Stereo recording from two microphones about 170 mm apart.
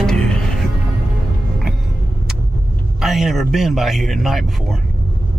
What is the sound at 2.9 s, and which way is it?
A man's voice, centre (ahead or behind).